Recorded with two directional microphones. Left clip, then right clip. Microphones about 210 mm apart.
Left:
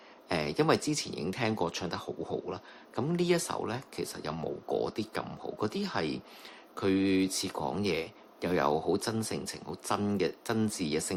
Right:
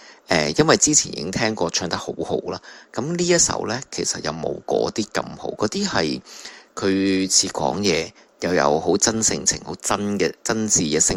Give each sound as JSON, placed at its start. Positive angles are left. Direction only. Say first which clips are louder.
{"t": 0.3, "sound": "speech", "louder": "right 11 dB", "side_deg": -35}